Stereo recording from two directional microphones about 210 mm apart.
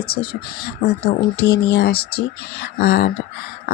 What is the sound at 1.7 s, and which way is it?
Speech, 50° left (ahead or behind).